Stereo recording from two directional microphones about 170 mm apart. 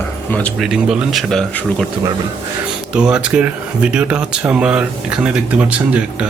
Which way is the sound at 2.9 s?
5° right (ahead or behind).